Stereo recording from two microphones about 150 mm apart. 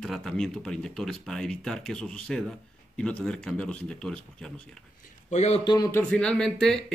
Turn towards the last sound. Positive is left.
turn(degrees=5)  # may be behind; listen again after turning